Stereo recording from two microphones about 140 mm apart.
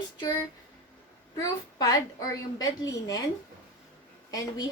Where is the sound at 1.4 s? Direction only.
25° left (ahead or behind).